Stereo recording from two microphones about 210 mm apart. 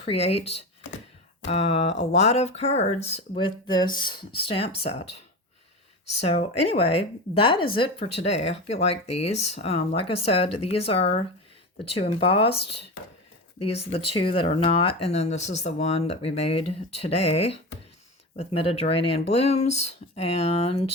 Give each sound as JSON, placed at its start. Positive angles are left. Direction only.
{"t": 0.0, "sound": "speech", "side_deg": 30}
{"t": 13.6, "sound": "speech", "side_deg": 30}